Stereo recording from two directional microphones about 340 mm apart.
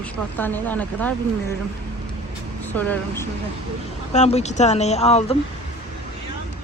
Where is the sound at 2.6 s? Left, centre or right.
Centre.